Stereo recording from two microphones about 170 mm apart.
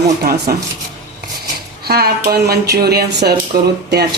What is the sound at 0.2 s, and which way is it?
Speech, 65° right (ahead or behind).